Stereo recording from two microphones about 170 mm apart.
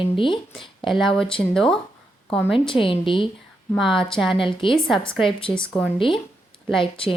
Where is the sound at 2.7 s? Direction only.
30° left (ahead or behind).